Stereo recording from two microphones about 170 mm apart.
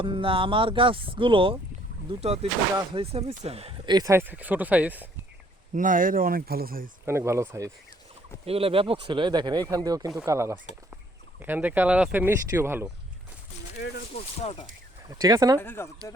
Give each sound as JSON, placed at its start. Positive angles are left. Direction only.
{"t": 0.0, "sound": "speech", "side_deg": -30}
{"t": 5.7, "sound": "speech", "side_deg": -50}
{"t": 7.0, "sound": "speech", "side_deg": -15}
{"t": 8.4, "sound": "speech", "side_deg": -35}
{"t": 13.7, "sound": "speech", "side_deg": 70}
{"t": 14.4, "sound": "speech", "side_deg": 35}
{"t": 15.0, "sound": "speech", "side_deg": -20}
{"t": 15.5, "sound": "speech", "side_deg": 10}